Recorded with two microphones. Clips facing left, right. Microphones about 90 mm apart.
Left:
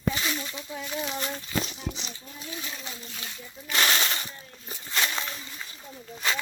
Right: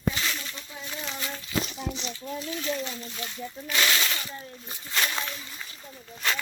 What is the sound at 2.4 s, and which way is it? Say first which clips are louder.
Speech: right 5 dB; 15° left (ahead or behind).